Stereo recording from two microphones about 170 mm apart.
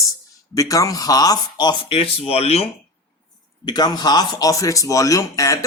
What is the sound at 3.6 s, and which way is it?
Speech, 25° left (ahead or behind).